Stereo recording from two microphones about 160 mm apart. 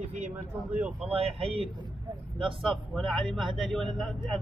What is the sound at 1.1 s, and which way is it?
Speech, 35° right (ahead or behind).